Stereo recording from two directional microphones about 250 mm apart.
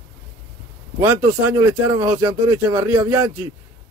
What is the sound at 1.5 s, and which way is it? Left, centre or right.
Speech, centre.